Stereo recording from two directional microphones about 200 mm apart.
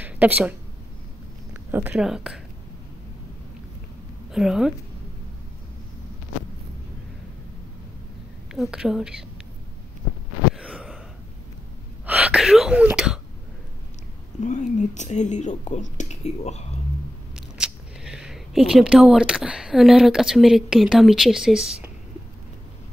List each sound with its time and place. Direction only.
0.0 s a woman's voice: 10° right (ahead or behind)
4.3 s a woman's voice: 5° right (ahead or behind)
8.5 s a woman's voice: centre (ahead or behind)
10.5 s gasp: 5° right (ahead or behind)
12.1 s speech: 5° right (ahead or behind)
14.4 s speech: 35° left (ahead or behind)
17.4 s speech: 5° right (ahead or behind)